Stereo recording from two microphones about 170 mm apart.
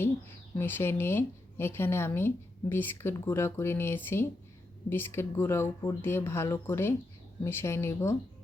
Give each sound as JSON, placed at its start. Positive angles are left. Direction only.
{"t": 0.5, "sound": "speech", "side_deg": 10}